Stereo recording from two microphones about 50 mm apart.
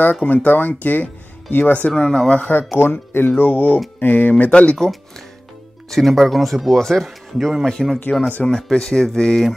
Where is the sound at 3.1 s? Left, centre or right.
Left.